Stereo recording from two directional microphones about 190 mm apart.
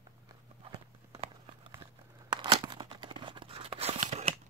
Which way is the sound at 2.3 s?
25° right (ahead or behind).